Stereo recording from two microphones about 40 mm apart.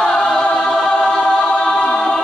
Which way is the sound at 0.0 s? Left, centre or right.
Centre.